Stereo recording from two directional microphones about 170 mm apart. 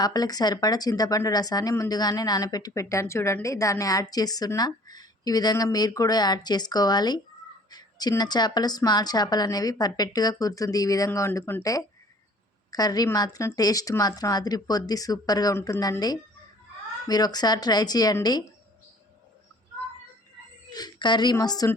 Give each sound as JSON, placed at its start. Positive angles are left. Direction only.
{"t": 0.0, "sound": "speech", "side_deg": 20}
{"t": 20.7, "sound": "a woman's voice", "side_deg": 25}